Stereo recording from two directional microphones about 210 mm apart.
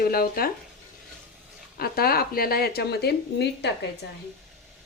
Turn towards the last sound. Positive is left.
turn(degrees=50)  # may be behind; listen again after turning